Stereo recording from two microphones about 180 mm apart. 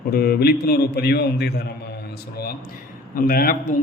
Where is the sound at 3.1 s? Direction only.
55° left (ahead or behind).